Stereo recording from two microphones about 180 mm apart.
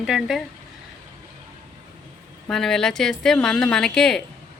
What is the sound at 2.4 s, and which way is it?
Speech, centre (ahead or behind).